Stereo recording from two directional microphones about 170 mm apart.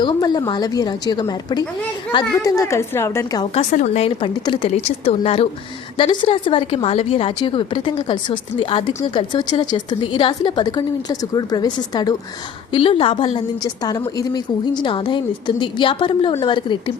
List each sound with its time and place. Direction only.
0.0 s a woman's voice: 25° left (ahead or behind)
3.5 s a woman's voice: 45° left (ahead or behind); by 16.9 s 30° left (ahead or behind)